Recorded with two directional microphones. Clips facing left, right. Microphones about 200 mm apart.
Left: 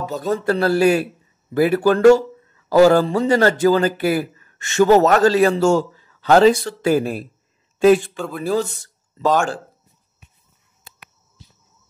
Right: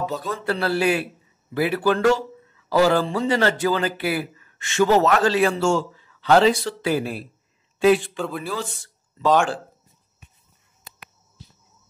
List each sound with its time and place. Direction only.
0.0 s speech: 45° left (ahead or behind)